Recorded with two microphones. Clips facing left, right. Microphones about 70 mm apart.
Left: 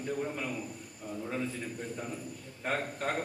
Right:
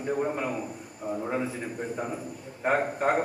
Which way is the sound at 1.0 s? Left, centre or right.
Right.